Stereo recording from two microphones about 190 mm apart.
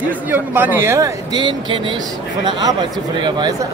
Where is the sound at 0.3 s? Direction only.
10° right (ahead or behind).